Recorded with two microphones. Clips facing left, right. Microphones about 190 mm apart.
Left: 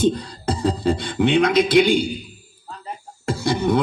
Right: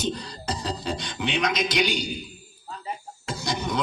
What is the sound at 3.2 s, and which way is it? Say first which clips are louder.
Beatboxing: left 9 dB; 55° left (ahead or behind).